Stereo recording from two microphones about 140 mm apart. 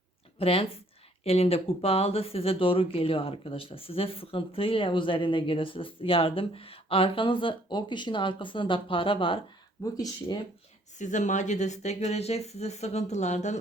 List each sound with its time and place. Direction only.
0.3 s a woman's voice: 45° left (ahead or behind)
9.8 s speech: 25° left (ahead or behind)
10.9 s speech: 60° left (ahead or behind)